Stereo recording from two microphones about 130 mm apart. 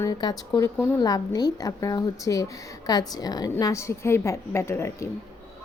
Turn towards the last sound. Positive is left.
turn(degrees=20)  # may be behind; listen again after turning